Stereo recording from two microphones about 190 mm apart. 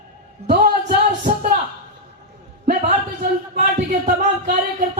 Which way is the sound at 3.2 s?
55° right (ahead or behind).